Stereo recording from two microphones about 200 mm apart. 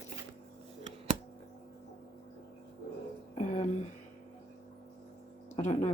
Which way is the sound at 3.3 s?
35° left (ahead or behind).